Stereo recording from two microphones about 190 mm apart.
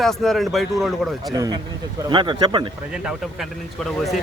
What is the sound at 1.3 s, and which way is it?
Speech, 20° right (ahead or behind).